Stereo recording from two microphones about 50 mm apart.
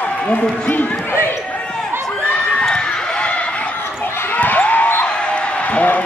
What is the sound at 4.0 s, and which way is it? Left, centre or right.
Basketball bounce, left.